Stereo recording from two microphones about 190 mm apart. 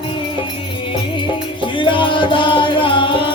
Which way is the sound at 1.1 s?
25° left (ahead or behind).